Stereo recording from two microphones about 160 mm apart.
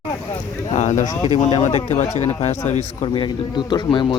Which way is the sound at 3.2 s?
30° left (ahead or behind).